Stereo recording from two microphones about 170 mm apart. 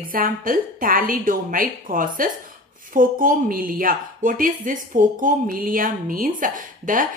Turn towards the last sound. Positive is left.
turn(degrees=-50)  # may be behind; listen again after turning